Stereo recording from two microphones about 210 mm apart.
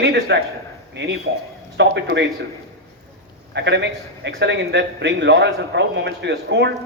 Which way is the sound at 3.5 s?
55° right (ahead or behind).